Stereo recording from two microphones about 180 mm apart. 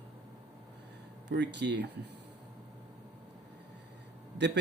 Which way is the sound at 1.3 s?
75° right (ahead or behind).